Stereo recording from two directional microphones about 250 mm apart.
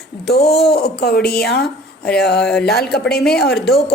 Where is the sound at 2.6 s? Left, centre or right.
Left.